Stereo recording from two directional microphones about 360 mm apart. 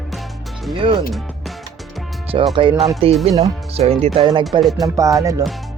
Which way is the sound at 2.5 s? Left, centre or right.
Centre.